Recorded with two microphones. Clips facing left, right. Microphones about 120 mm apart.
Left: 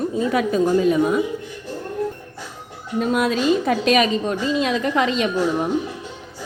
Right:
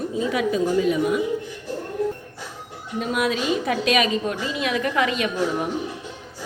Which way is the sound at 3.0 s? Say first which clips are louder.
Left 4 dB; 40° left (ahead or behind).